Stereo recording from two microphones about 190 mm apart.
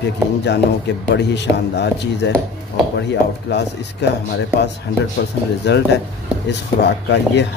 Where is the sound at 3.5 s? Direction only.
65° left (ahead or behind).